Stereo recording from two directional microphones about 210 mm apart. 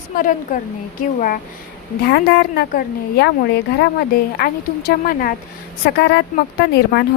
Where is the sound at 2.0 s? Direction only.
50° left (ahead or behind).